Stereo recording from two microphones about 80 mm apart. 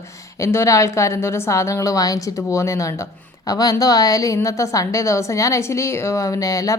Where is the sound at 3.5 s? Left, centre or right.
Left.